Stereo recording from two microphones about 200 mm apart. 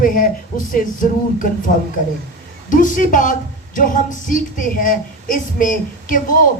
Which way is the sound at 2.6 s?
40° left (ahead or behind).